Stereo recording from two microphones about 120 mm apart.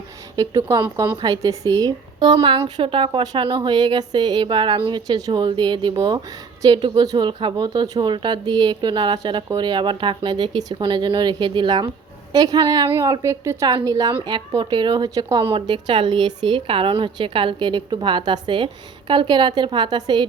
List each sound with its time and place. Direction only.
0.3 s speech: 30° right (ahead or behind)